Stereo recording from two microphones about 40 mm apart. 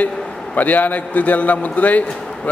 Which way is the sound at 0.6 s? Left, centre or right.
Left.